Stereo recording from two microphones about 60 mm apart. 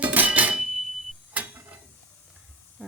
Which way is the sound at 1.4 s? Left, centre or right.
Right.